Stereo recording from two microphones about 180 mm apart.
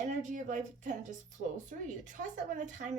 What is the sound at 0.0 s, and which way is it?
Speech, 40° right (ahead or behind).